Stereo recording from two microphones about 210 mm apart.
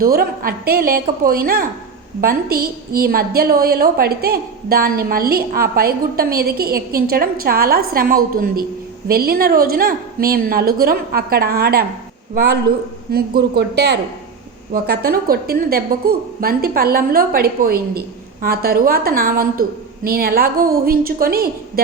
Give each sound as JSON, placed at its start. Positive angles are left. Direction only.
{"t": 0.0, "sound": "a woman's voice", "side_deg": -45}